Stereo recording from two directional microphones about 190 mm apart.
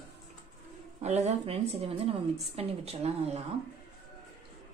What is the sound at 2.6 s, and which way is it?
Speech, 35° right (ahead or behind).